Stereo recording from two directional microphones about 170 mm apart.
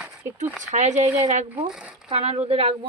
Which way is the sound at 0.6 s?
45° right (ahead or behind).